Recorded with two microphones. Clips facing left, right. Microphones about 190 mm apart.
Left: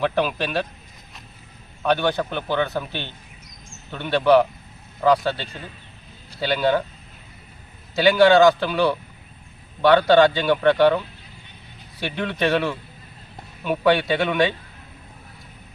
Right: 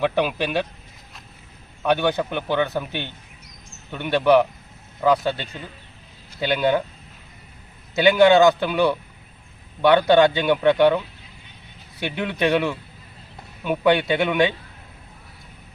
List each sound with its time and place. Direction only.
0.0 s a man's voice: 10° right (ahead or behind)
1.8 s a man's voice: 15° right (ahead or behind)
4.9 s a man's voice: centre (ahead or behind)
5.2 s a man's voice: 15° right (ahead or behind)
7.9 s a man's voice: 20° right (ahead or behind)